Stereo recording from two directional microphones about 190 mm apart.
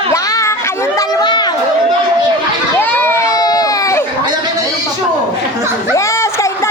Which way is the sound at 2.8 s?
10° left (ahead or behind).